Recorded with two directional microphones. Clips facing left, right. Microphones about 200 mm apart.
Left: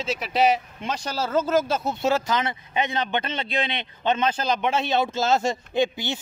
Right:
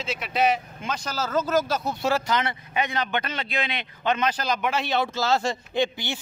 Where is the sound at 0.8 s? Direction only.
35° left (ahead or behind).